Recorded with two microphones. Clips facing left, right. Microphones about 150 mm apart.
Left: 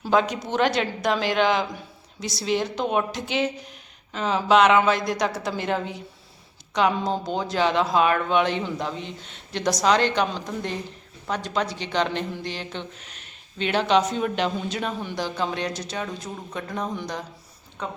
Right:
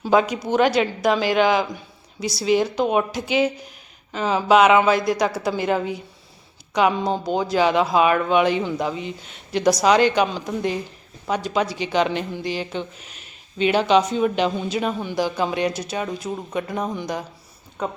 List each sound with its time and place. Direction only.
0.0 s speech: 5° right (ahead or behind)